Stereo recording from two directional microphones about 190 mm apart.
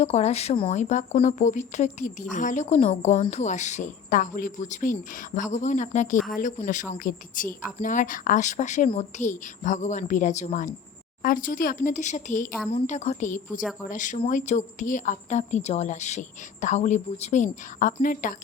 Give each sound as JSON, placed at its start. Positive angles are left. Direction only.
{"t": 0.0, "sound": "speech", "side_deg": 35}